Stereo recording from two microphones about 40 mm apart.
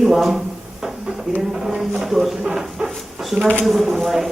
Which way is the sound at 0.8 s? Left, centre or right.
Centre.